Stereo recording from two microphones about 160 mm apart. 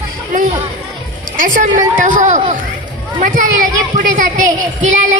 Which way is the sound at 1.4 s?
55° right (ahead or behind).